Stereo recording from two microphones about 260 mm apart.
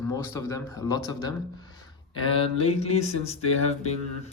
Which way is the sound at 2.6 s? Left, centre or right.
Left.